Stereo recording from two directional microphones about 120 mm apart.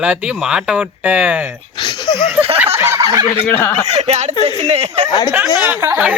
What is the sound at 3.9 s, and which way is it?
Speech, 55° right (ahead or behind).